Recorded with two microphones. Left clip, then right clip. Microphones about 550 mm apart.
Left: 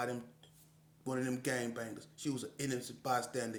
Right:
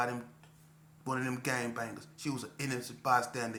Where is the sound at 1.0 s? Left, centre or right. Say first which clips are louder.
Right 3 dB; left.